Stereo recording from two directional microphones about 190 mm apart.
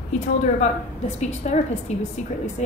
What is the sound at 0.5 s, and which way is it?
A woman's voice, 35° left (ahead or behind).